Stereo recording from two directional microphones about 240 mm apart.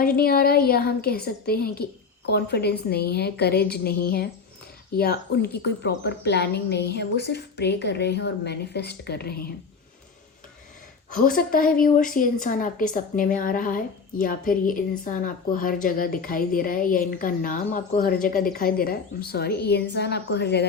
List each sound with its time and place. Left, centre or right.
0.0 s a woman's voice: left
11.1 s a woman's voice: left